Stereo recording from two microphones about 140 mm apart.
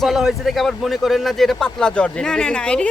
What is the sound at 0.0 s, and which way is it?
Speech, centre (ahead or behind).